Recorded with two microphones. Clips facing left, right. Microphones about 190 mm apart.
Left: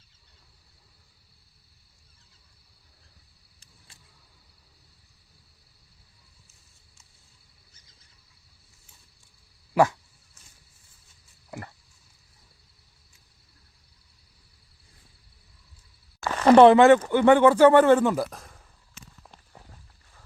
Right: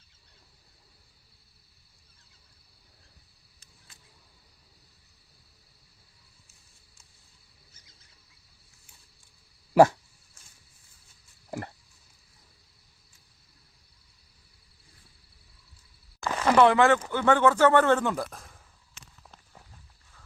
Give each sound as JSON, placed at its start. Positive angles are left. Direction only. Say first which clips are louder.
{"t": 9.7, "sound": "dog", "louder": "right 3 dB", "side_deg": -30}
{"t": 16.4, "sound": "speech", "louder": "left 6 dB", "side_deg": 30}
{"t": 19.2, "sound": "walk", "louder": "left 2 dB", "side_deg": 5}